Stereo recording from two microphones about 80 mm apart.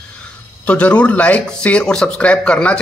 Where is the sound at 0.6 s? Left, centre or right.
Centre.